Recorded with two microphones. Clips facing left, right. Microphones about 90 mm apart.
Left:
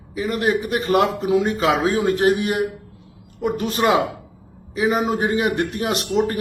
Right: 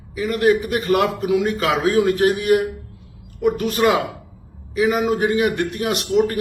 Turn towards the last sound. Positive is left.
turn(degrees=30)  # may be behind; listen again after turning